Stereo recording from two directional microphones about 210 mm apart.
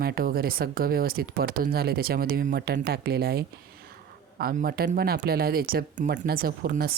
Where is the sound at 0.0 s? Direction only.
45° right (ahead or behind).